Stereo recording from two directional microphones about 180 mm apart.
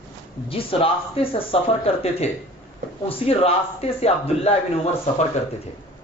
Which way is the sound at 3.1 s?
35° left (ahead or behind).